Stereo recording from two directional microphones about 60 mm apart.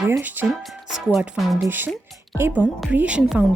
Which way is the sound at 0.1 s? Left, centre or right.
Right.